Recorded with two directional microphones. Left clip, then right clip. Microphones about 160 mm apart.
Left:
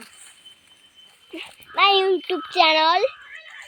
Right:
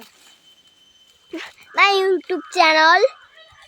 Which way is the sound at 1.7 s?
20° right (ahead or behind).